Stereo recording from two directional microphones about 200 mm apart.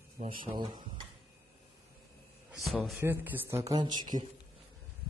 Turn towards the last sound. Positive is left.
turn(degrees=-20)  # may be behind; listen again after turning